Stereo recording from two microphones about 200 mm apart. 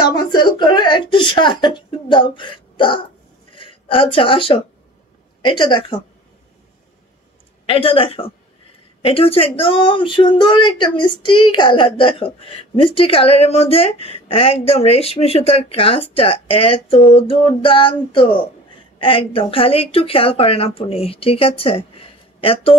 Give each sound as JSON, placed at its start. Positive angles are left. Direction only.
{"t": 0.0, "sound": "a woman's voice", "side_deg": 20}
{"t": 7.6, "sound": "speech", "side_deg": 25}
{"t": 18.9, "sound": "speech", "side_deg": 25}